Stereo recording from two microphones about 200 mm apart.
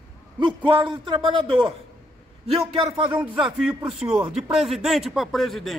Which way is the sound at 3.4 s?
Centre (ahead or behind).